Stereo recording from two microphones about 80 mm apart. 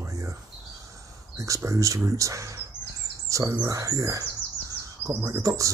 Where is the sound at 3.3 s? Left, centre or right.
Right.